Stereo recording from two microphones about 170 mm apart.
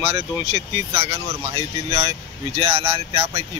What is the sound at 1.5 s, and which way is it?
Speech, 35° right (ahead or behind).